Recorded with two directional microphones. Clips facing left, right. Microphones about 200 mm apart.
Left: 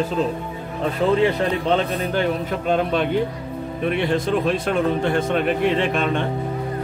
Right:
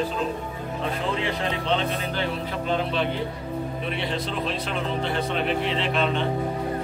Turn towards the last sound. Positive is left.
turn(degrees=50)  # may be behind; listen again after turning